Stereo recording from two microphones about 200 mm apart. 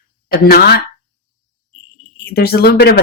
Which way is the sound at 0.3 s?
50° left (ahead or behind).